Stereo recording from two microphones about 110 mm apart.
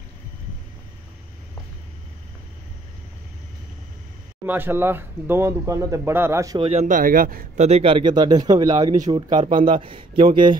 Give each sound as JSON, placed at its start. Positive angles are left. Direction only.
{"t": 4.5, "sound": "speech", "side_deg": -20}
{"t": 6.6, "sound": "speech", "side_deg": -75}
{"t": 7.5, "sound": "speech", "side_deg": -90}
{"t": 7.8, "sound": "speech", "side_deg": -45}